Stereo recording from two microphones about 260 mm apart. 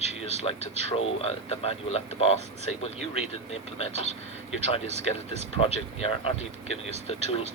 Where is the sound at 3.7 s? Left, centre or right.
Left.